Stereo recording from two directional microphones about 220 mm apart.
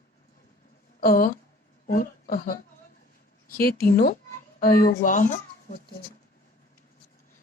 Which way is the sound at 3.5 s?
45° left (ahead or behind).